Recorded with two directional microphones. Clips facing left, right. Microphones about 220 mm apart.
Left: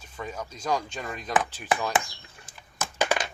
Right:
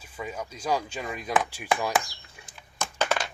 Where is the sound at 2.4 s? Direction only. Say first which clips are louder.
Right 1 dB; 10° right (ahead or behind).